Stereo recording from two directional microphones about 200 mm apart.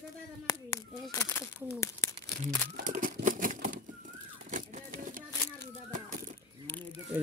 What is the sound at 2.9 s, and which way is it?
Crumpling, 40° right (ahead or behind).